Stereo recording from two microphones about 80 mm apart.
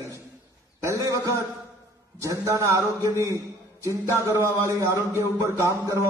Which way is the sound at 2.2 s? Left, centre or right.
Right.